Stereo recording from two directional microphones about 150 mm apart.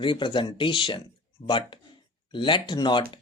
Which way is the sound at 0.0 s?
35° left (ahead or behind).